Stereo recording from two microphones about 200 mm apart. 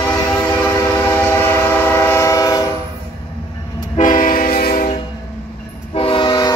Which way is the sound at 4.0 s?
40° left (ahead or behind).